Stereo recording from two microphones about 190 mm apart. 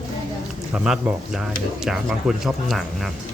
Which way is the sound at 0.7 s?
5° right (ahead or behind).